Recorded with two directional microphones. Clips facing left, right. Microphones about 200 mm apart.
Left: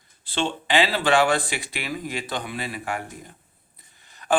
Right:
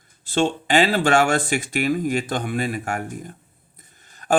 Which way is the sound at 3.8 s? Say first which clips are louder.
Right 1 dB; 45° right (ahead or behind).